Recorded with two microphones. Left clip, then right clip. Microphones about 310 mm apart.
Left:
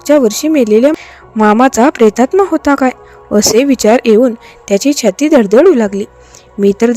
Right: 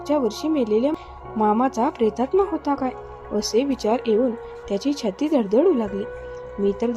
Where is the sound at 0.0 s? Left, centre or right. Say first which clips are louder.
Left 13 dB; left.